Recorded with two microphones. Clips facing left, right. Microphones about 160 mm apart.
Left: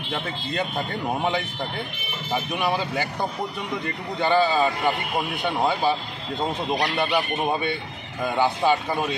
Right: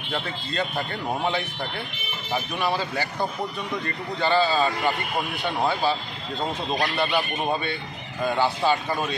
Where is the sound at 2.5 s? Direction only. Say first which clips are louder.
Left 1 dB; 15° left (ahead or behind).